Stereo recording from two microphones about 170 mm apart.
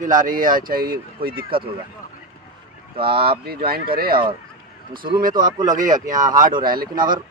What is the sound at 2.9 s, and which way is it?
Speech, 30° right (ahead or behind).